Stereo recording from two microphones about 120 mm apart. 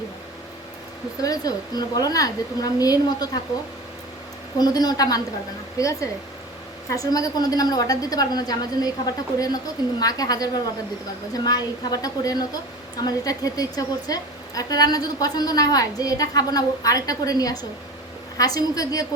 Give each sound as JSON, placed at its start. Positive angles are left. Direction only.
{"t": 1.2, "sound": "a woman's voice", "side_deg": 30}
{"t": 4.5, "sound": "a woman's voice", "side_deg": 35}